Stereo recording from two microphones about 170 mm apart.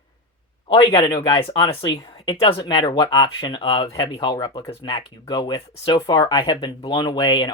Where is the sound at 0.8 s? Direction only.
30° left (ahead or behind).